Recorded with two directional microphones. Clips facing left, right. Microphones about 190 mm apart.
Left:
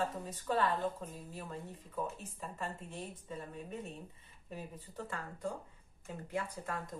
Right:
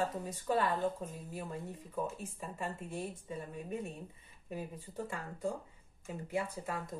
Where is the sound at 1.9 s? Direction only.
10° right (ahead or behind).